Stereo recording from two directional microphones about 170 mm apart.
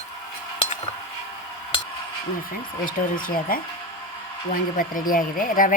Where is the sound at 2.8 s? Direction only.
55° left (ahead or behind).